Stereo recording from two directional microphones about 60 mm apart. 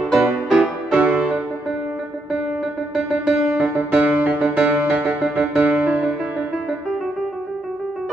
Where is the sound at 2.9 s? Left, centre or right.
Centre.